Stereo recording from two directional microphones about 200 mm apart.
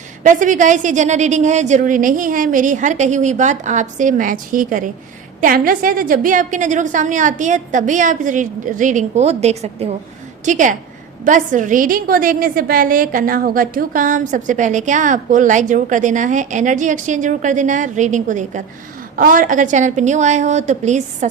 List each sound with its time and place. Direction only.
0.2 s a woman's voice: 40° right (ahead or behind)